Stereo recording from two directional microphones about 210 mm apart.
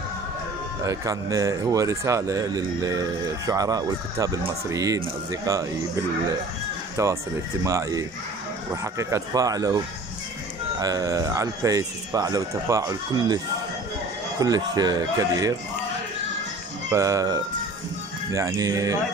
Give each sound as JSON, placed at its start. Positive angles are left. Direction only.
{"t": 0.8, "sound": "speech", "side_deg": -15}
{"t": 7.0, "sound": "speech", "side_deg": -15}
{"t": 10.8, "sound": "speech", "side_deg": -15}
{"t": 14.4, "sound": "speech", "side_deg": -20}
{"t": 16.9, "sound": "speech", "side_deg": -15}